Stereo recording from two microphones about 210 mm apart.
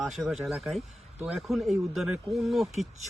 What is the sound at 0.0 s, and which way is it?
Speech, centre (ahead or behind).